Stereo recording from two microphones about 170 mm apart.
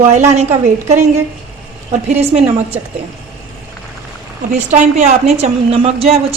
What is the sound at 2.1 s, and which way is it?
Speech, 35° right (ahead or behind).